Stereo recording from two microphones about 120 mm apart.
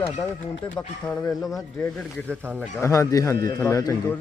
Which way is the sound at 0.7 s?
5° left (ahead or behind).